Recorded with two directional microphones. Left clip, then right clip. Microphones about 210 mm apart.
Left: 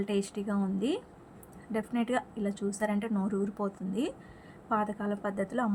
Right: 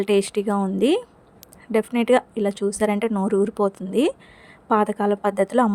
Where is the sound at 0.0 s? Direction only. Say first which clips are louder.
Right 13 dB; 45° right (ahead or behind).